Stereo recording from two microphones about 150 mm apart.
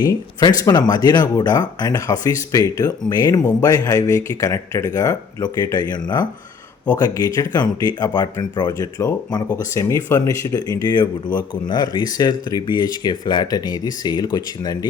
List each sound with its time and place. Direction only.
0.3 s speech: 30° left (ahead or behind)